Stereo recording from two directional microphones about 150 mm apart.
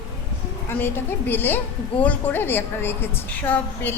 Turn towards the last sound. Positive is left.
turn(degrees=10)  # may be behind; listen again after turning